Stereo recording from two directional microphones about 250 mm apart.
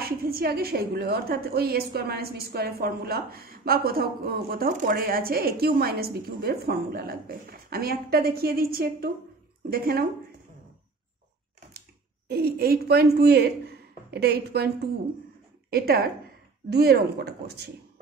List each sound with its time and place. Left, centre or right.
0.0 s a woman's voice: right
12.3 s a woman's voice: right
15.7 s a woman's voice: right